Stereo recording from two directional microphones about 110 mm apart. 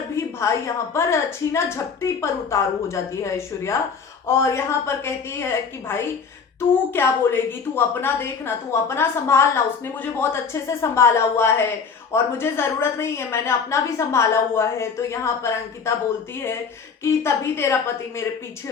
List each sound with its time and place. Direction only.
0.2 s a sound: 25° left (ahead or behind)
0.9 s a woman's voice: 25° left (ahead or behind)
17.0 s a woman's voice: 25° left (ahead or behind)